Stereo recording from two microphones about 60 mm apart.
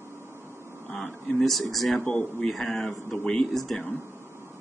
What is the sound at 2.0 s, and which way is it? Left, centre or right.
Speech, left.